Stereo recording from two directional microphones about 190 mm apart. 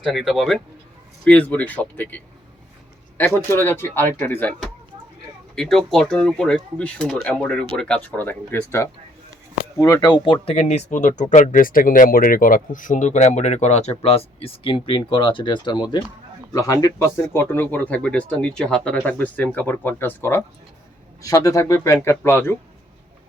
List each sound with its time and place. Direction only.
0.0 s speech: centre (ahead or behind)